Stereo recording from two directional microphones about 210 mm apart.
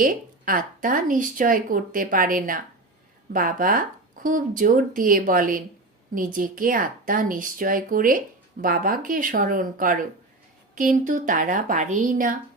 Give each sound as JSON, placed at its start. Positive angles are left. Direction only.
{"t": 0.0, "sound": "speech", "side_deg": -40}